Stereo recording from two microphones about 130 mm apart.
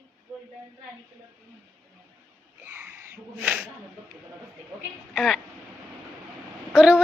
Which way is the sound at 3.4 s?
10° right (ahead or behind).